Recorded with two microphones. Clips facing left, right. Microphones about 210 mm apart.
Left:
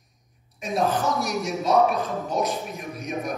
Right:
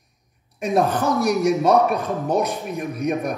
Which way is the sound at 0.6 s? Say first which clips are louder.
Right 4 dB; 55° right (ahead or behind).